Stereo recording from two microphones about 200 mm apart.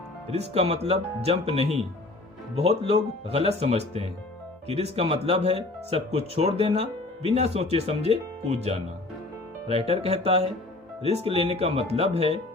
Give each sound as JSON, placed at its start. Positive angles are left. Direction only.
{"t": 0.3, "sound": "speech", "side_deg": -30}
{"t": 9.6, "sound": "speech", "side_deg": -30}